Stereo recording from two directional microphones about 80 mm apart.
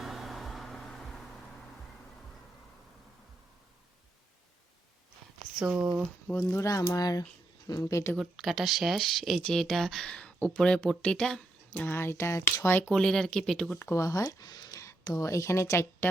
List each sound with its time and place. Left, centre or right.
0.0 s a sound: centre
5.5 s speech: centre
6.5 s speech: left
8.1 s speech: centre
11.7 s speech: left
12.9 s speech: centre
13.7 s speech: left